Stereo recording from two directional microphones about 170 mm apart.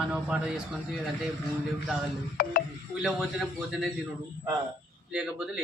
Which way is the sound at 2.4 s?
60° left (ahead or behind).